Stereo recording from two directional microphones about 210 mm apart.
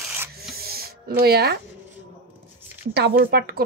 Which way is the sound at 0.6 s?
45° right (ahead or behind).